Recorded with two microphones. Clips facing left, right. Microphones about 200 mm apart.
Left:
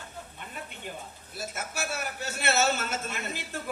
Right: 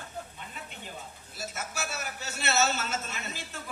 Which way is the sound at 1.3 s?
55° left (ahead or behind).